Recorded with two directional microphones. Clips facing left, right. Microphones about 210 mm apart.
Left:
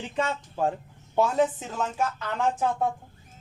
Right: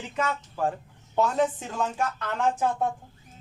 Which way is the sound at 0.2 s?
25° left (ahead or behind).